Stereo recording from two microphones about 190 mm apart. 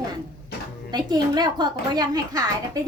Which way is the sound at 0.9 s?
20° right (ahead or behind).